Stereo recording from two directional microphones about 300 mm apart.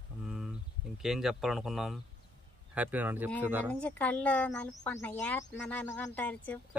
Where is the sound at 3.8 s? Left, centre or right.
Centre.